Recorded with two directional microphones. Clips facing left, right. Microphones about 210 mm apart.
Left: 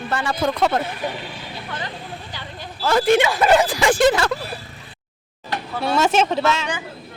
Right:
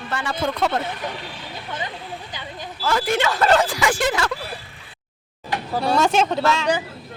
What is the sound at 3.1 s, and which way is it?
Speech, 15° left (ahead or behind).